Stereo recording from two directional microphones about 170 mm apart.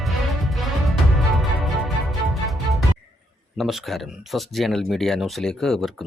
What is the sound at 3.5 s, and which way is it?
Speech, centre (ahead or behind).